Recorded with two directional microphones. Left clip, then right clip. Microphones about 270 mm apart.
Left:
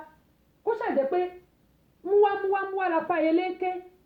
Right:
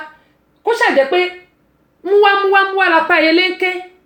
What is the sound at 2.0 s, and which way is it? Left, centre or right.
Speech, right.